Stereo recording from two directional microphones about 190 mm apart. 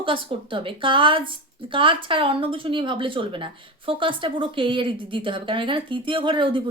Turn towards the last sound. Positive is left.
turn(degrees=-25)  # may be behind; listen again after turning